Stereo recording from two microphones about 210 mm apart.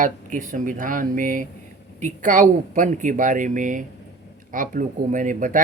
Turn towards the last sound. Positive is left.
turn(degrees=-40)  # may be behind; listen again after turning